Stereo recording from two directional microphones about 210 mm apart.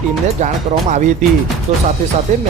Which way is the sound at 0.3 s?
35° right (ahead or behind).